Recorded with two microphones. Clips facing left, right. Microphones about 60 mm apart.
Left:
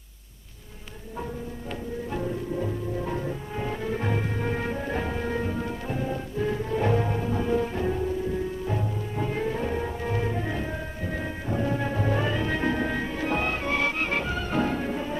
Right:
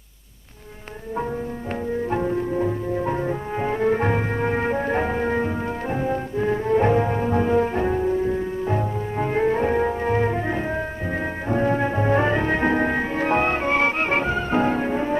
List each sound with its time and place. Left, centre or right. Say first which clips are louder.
2.0 s music: right 6 dB; right